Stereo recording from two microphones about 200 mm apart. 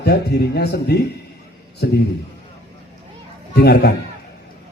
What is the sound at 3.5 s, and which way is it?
Music, 55° left (ahead or behind).